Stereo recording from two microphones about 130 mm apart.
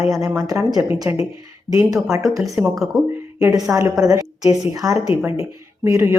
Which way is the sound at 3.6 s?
20° right (ahead or behind).